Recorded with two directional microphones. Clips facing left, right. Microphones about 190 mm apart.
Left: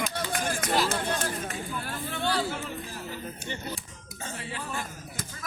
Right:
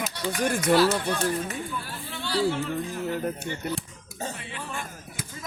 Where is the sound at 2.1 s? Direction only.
50° left (ahead or behind).